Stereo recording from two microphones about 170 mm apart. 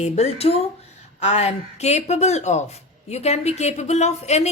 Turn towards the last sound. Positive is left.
turn(degrees=40)  # may be behind; listen again after turning